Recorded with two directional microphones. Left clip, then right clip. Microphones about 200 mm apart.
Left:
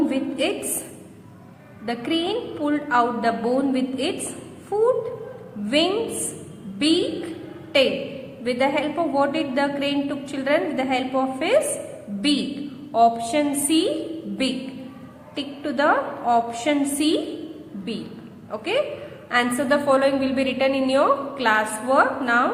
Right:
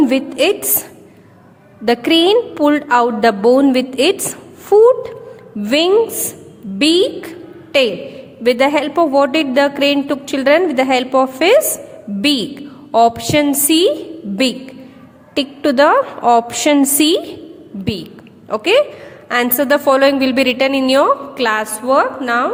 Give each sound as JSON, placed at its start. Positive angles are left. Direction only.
{"t": 0.1, "sound": "a woman's voice", "side_deg": -55}
{"t": 1.8, "sound": "a woman's voice", "side_deg": -55}
{"t": 8.4, "sound": "a woman's voice", "side_deg": -55}
{"t": 15.4, "sound": "a woman's voice", "side_deg": -55}
{"t": 18.5, "sound": "a woman's voice", "side_deg": -55}